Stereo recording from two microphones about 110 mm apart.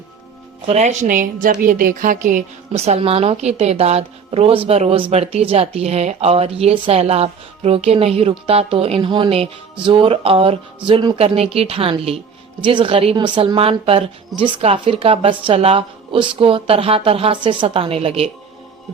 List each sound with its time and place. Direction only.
0.7 s speech: 90° right
2.7 s a woman's voice: 70° right (ahead or behind)
13.1 s a woman's voice: 45° right (ahead or behind); by 18.3 s 65° right (ahead or behind)